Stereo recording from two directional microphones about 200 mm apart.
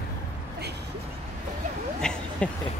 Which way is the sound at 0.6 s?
55° right (ahead or behind).